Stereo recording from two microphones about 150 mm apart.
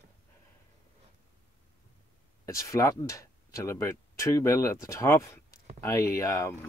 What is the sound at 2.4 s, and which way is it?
Speech, 20° left (ahead or behind).